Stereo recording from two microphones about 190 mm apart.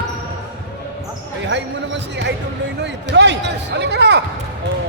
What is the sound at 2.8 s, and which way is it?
Speech, 65° right (ahead or behind).